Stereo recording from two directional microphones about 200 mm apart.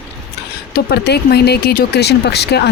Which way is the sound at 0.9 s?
55° left (ahead or behind).